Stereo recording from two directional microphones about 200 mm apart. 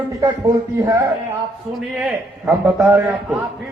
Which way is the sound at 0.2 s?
20° right (ahead or behind).